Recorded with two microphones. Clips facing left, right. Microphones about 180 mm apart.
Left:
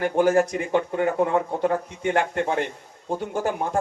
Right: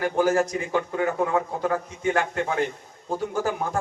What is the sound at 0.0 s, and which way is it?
A man's voice, 30° left (ahead or behind).